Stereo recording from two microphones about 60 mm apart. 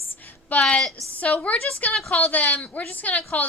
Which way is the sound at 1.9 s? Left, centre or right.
Centre.